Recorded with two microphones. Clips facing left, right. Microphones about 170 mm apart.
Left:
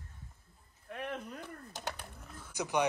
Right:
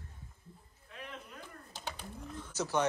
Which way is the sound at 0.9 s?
55° left (ahead or behind).